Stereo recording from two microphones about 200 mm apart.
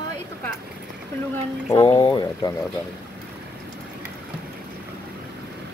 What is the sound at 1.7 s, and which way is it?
Speech, 25° left (ahead or behind).